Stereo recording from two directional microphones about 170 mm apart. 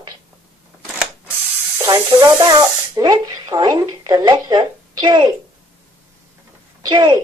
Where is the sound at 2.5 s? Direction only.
20° right (ahead or behind).